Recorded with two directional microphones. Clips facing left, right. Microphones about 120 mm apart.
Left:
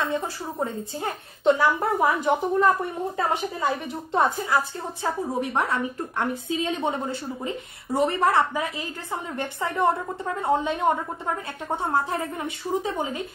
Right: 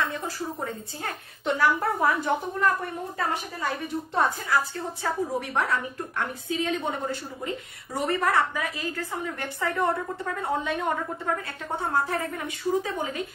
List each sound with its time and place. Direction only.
0.0 s speech: 20° left (ahead or behind)